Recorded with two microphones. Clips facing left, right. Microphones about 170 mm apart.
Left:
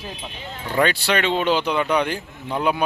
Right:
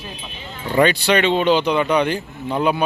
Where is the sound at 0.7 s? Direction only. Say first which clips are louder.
Right 4 dB; centre (ahead or behind).